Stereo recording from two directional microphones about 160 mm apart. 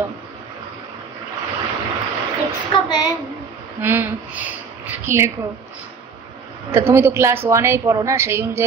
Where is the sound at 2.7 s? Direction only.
25° left (ahead or behind).